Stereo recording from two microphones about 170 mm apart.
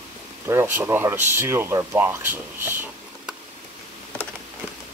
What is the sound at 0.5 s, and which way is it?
Speech, 15° right (ahead or behind).